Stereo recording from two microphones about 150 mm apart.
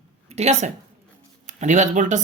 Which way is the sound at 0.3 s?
50° right (ahead or behind).